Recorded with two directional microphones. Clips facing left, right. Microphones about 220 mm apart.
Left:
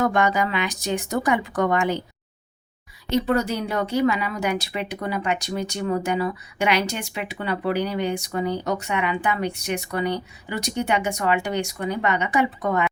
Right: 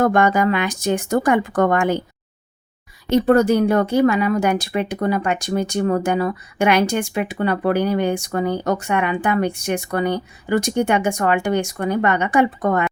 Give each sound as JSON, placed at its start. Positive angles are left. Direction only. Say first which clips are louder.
{"t": 0.0, "sound": "a woman's voice", "louder": "right 5 dB", "side_deg": -50}
{"t": 3.1, "sound": "a woman's voice", "louder": "right 7 dB", "side_deg": -50}